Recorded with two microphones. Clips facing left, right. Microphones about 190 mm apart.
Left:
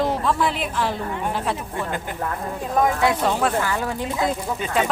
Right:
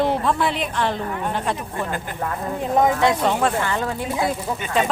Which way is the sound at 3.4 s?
5° left (ahead or behind).